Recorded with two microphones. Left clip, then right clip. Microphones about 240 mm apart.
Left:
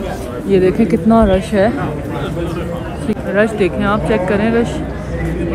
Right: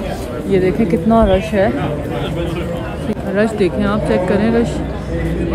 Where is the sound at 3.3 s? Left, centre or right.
Centre.